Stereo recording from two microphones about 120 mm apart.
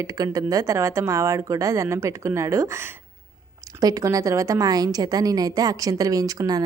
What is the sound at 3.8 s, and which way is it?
A woman's voice, 30° right (ahead or behind).